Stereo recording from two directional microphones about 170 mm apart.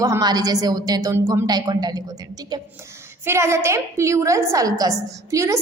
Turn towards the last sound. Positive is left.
turn(degrees=-20)  # may be behind; listen again after turning